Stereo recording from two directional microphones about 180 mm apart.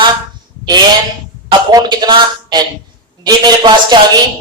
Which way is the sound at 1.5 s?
25° right (ahead or behind).